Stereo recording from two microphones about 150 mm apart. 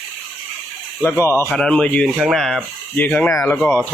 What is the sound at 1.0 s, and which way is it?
Speech, 15° left (ahead or behind).